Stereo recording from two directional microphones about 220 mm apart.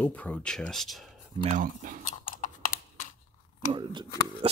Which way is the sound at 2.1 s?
35° left (ahead or behind).